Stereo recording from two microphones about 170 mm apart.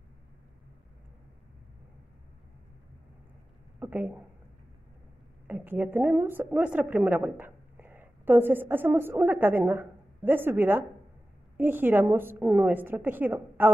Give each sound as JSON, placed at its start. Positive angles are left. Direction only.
{"t": 3.8, "sound": "speech", "side_deg": -10}
{"t": 5.5, "sound": "a woman's voice", "side_deg": -10}